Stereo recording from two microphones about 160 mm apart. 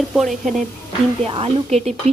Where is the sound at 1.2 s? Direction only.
40° right (ahead or behind).